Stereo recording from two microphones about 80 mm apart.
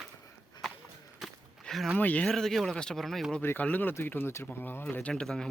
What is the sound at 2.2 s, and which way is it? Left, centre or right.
Speech, centre.